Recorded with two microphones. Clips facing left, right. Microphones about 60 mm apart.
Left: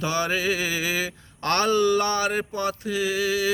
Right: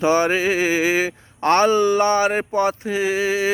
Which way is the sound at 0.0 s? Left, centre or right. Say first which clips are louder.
Right 7 dB; right.